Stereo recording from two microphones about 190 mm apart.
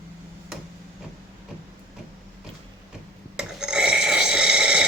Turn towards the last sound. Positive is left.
turn(degrees=-5)  # may be behind; listen again after turning